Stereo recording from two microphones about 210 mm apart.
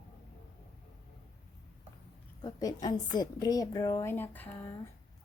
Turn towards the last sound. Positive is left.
turn(degrees=10)  # may be behind; listen again after turning